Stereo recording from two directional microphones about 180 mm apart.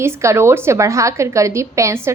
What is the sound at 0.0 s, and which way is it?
A woman's voice, 15° right (ahead or behind).